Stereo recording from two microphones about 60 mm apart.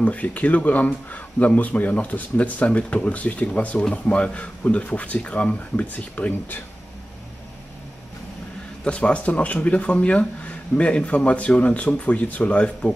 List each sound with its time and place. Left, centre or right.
0.0 s speech: left
8.8 s speech: left